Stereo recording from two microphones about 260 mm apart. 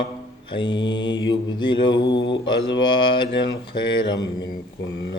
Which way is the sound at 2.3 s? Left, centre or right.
Centre.